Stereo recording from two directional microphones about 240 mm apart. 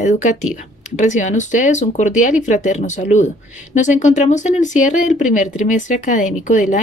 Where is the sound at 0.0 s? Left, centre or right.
Left.